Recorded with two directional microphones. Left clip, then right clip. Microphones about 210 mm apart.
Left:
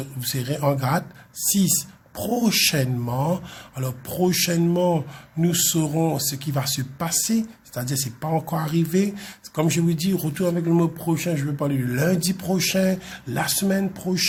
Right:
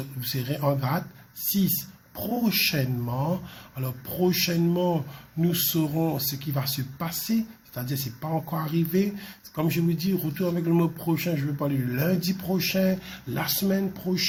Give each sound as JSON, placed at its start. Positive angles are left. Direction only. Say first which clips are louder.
{"t": 0.2, "sound": "speech", "louder": "left 4 dB", "side_deg": 15}
{"t": 2.1, "sound": "speech", "louder": "left 5 dB", "side_deg": 20}